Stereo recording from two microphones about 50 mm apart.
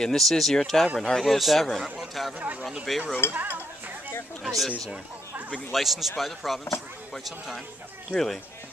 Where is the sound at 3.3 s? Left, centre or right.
Right.